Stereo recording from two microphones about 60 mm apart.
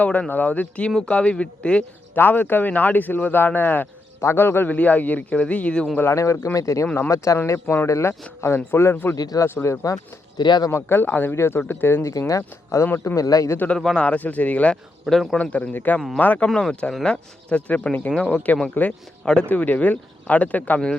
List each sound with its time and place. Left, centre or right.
0.0 s speech: left
2.1 s speech: left
4.2 s speech: left
4.7 s speech: left
6.1 s a man's voice: left
8.4 s speech: left
9.4 s speech: left
12.3 s speech: left
13.1 s speech: left
13.7 s speech: centre
14.0 s speech: left
15.0 s a man's voice: centre
15.4 s speech: left
19.5 s speech: left